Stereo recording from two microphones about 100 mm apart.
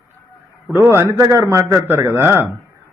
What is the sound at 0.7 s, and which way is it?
A man's voice, 25° right (ahead or behind).